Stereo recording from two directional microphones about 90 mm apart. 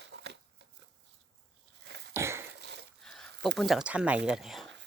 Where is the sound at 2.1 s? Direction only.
30° right (ahead or behind).